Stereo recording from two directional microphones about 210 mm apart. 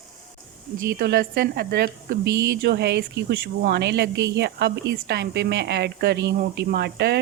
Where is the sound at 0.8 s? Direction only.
45° right (ahead or behind).